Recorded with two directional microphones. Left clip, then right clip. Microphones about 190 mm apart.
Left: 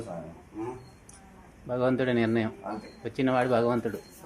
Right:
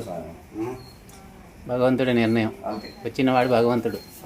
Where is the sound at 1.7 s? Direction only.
15° left (ahead or behind).